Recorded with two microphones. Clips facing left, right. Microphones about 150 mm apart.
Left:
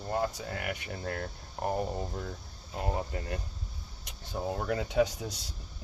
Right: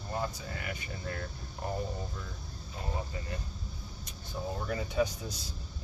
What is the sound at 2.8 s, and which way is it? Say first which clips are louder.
Speech: left 5 dB; 60° left (ahead or behind).